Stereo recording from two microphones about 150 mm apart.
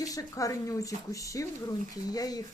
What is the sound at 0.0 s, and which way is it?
Speech, 25° left (ahead or behind).